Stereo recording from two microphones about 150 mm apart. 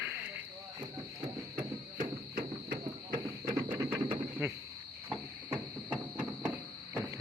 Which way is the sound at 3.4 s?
25° right (ahead or behind).